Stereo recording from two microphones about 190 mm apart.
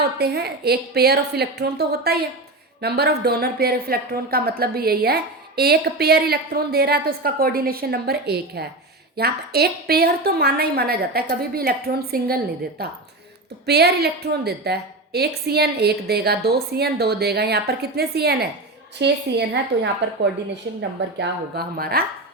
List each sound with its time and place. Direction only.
0.0 s a woman's voice: 55° right (ahead or behind)
21.2 s speech: 55° right (ahead or behind)